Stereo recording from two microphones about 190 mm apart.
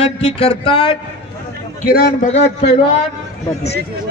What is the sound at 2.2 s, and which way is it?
Speech, 35° left (ahead or behind).